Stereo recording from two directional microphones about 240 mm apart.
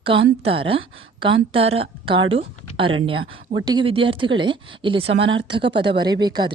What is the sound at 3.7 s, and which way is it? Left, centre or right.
A woman's voice, right.